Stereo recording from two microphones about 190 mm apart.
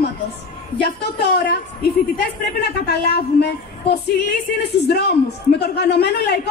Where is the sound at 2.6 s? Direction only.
60° left (ahead or behind).